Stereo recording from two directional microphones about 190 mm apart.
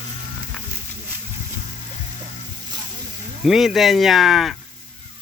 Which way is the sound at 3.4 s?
Centre (ahead or behind).